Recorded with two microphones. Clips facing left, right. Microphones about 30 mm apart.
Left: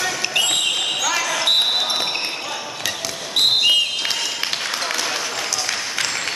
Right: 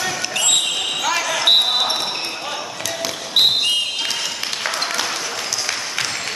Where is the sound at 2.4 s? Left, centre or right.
Centre.